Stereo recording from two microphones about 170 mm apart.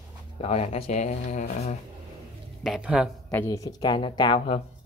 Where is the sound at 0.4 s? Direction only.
40° left (ahead or behind).